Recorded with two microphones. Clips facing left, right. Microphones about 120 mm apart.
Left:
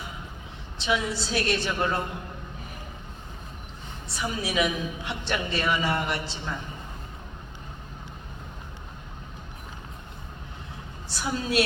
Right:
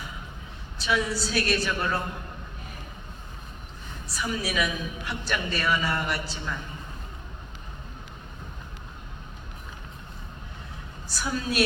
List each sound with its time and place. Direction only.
0.8 s a woman's voice: 25° left (ahead or behind)
4.1 s a woman's voice: 25° left (ahead or behind)
11.1 s a woman's voice: 25° left (ahead or behind)